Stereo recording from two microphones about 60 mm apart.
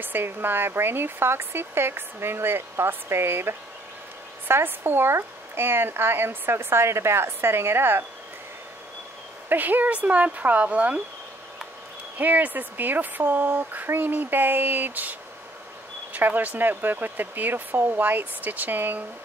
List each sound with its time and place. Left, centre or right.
0.0 s speech: right
9.5 s speech: right
12.2 s speech: right